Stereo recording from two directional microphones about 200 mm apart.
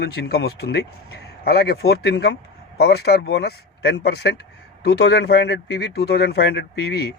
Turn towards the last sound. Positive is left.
turn(degrees=55)  # may be behind; listen again after turning